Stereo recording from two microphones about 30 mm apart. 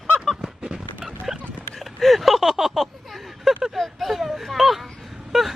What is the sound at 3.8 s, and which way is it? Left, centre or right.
A man's voice, centre.